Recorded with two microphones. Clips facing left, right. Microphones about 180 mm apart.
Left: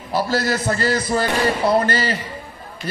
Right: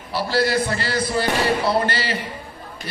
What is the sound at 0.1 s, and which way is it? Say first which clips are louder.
A man's voice: even; 45° left (ahead or behind).